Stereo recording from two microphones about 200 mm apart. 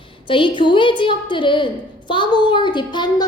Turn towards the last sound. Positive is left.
turn(degrees=20)  # may be behind; listen again after turning